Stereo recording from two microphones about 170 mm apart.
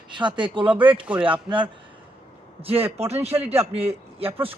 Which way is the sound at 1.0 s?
10° right (ahead or behind).